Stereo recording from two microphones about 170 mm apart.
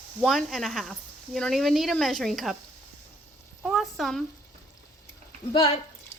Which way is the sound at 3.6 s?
Centre (ahead or behind).